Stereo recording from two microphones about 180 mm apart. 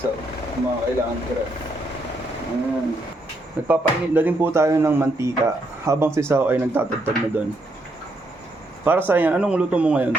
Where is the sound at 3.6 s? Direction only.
10° right (ahead or behind).